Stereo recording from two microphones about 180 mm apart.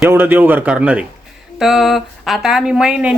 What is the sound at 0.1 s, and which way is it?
A woman's voice, 10° right (ahead or behind).